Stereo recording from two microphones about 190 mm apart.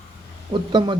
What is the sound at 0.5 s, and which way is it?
Speech, 25° right (ahead or behind).